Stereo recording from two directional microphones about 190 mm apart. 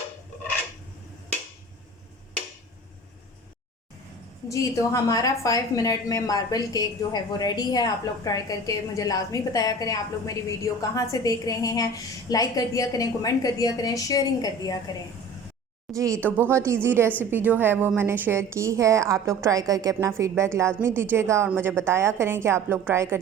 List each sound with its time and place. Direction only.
4.4 s a woman's voice: 15° left (ahead or behind)
15.9 s a woman's voice: 15° right (ahead or behind)